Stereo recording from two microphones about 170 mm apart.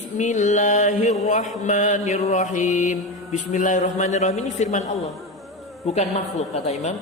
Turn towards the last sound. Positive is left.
turn(degrees=40)  # may be behind; listen again after turning